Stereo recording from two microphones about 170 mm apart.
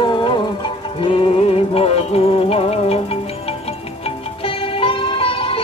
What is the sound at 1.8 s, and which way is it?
Music, 35° left (ahead or behind).